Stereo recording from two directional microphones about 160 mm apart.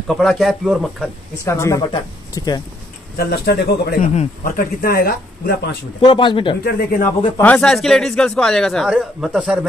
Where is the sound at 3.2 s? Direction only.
85° left.